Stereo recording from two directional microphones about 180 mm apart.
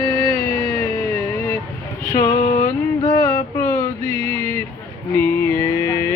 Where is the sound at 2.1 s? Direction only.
20° left (ahead or behind).